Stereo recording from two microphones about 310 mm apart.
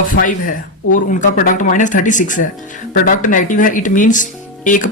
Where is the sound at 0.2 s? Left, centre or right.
Left.